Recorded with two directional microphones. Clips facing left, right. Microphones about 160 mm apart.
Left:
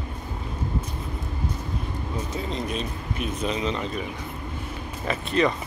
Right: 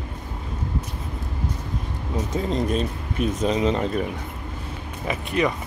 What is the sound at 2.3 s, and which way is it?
Speech, 45° right (ahead or behind).